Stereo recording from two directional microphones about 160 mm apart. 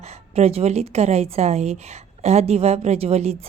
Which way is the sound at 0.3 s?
40° right (ahead or behind).